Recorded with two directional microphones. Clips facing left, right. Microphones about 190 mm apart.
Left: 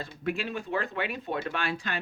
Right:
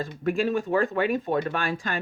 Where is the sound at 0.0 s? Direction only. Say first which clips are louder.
Right 7 dB; 45° right (ahead or behind).